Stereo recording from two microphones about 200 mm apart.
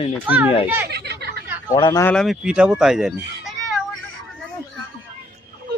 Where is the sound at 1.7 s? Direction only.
25° left (ahead or behind).